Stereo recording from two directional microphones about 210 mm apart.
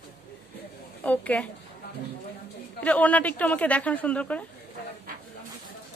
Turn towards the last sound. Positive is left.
turn(degrees=5)  # may be behind; listen again after turning